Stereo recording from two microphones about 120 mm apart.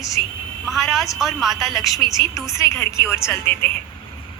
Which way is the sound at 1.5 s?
25° left (ahead or behind).